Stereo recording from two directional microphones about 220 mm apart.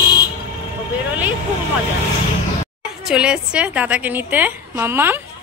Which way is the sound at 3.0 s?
5° right (ahead or behind).